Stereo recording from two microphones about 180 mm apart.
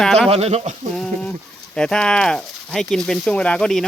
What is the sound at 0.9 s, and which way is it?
Speech, centre (ahead or behind).